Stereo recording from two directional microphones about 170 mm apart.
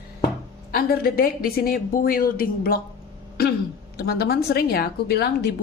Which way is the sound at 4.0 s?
70° left (ahead or behind).